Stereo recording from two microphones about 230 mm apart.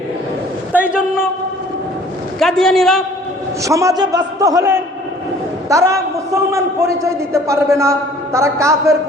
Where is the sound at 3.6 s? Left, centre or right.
Centre.